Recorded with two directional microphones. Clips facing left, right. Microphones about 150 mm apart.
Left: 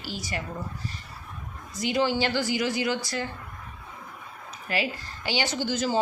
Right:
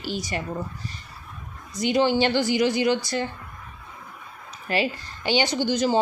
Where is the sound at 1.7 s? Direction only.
20° right (ahead or behind).